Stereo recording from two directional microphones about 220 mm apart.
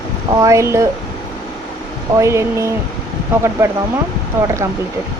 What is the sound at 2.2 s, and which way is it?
Speech, 15° right (ahead or behind).